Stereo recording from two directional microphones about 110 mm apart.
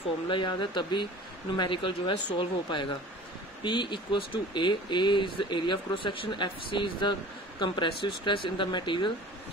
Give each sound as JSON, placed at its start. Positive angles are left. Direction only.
{"t": 0.3, "sound": "speech", "side_deg": 45}